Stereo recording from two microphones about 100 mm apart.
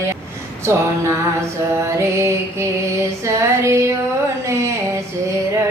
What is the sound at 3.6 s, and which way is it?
Music, 30° right (ahead or behind).